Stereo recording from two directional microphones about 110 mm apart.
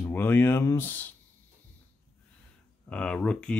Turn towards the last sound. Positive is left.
turn(degrees=10)  # may be behind; listen again after turning